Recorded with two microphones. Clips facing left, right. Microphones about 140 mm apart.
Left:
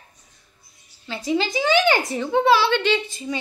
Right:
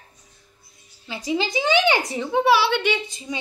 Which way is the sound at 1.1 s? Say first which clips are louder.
Left 1 dB; 15° right (ahead or behind).